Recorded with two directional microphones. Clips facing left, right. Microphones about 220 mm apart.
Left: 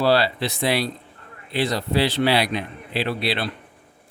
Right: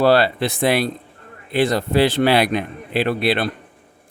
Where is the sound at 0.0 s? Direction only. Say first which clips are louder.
Right 4 dB; 55° right (ahead or behind).